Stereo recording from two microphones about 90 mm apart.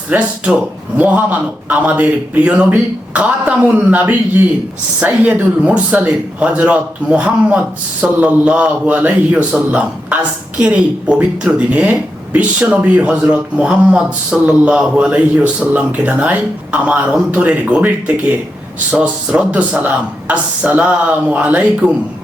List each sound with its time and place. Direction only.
0.1 s speech: 15° right (ahead or behind)